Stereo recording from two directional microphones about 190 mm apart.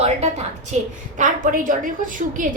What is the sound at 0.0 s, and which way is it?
Music, 35° right (ahead or behind).